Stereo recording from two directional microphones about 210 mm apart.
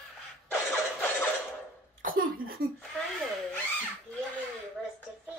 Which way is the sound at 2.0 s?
40° right (ahead or behind).